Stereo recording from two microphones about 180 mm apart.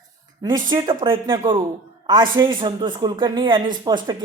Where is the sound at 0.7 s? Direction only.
25° right (ahead or behind).